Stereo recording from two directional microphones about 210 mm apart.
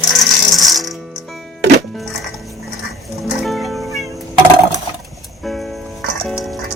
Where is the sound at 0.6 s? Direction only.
Centre (ahead or behind).